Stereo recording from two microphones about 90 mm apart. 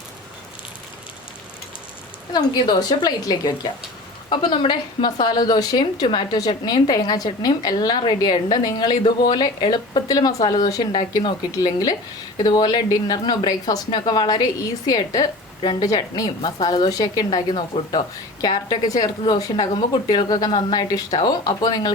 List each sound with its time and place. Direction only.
2.3 s a woman's voice: 55° left (ahead or behind)
4.3 s a woman's voice: 65° left (ahead or behind); by 20.5 s 50° left (ahead or behind)
20.5 s a woman's voice: 60° left (ahead or behind)
20.9 s a woman's voice: 45° left (ahead or behind)